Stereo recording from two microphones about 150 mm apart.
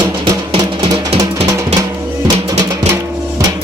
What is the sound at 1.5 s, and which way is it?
Music, 20° right (ahead or behind).